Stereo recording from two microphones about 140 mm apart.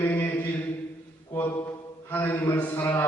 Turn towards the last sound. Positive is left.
turn(degrees=15)  # may be behind; listen again after turning